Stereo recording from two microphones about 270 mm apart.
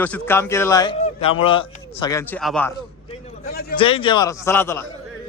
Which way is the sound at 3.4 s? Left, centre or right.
Left.